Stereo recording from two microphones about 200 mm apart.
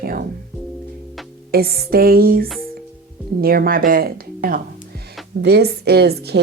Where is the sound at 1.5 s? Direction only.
50° right (ahead or behind).